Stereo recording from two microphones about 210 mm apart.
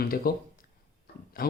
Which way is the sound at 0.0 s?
45° left (ahead or behind).